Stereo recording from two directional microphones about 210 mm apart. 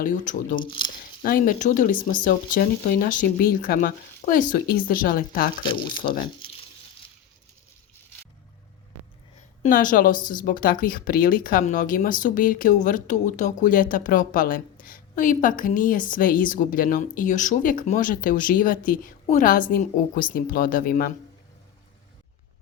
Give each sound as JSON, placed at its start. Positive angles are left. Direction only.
{"t": 0.0, "sound": "speech", "side_deg": 40}
{"t": 6.2, "sound": "a sound", "side_deg": 25}
{"t": 9.6, "sound": "speech", "side_deg": 40}